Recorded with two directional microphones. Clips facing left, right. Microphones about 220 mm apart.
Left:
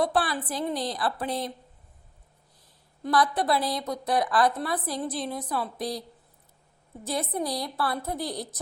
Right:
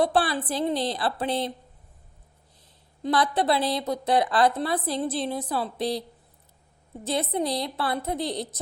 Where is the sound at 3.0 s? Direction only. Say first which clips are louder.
Right 1 dB; 25° right (ahead or behind).